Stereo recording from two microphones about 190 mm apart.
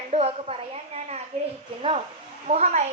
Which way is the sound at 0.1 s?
35° right (ahead or behind).